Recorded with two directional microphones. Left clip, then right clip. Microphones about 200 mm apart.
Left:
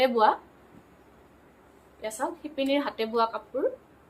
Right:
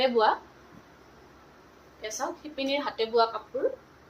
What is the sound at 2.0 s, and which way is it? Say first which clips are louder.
A woman's voice: left 2 dB; 55° left (ahead or behind).